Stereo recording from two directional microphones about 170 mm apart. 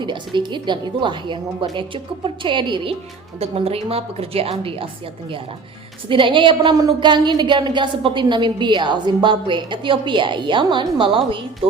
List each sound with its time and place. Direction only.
0.0 s a woman's voice: 25° right (ahead or behind)
6.1 s a woman's voice: 30° right (ahead or behind)